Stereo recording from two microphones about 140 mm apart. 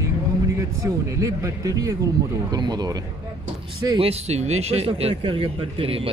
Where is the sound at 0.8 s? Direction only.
20° right (ahead or behind).